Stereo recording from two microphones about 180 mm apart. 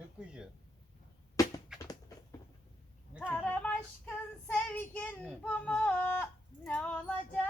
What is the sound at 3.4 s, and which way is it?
Child singing, 10° left (ahead or behind).